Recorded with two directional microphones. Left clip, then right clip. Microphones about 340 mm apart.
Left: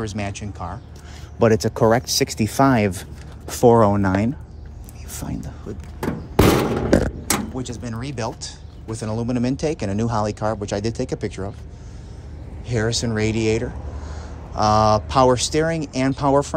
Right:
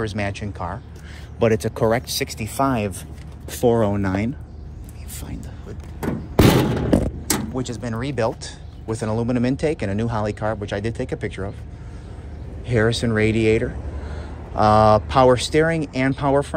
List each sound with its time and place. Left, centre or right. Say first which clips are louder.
0.0 s speech: right 3 dB; centre
5.1 s a sound: left 5 dB; left
7.2 s speech: even; centre
12.6 s speech: right 3 dB; centre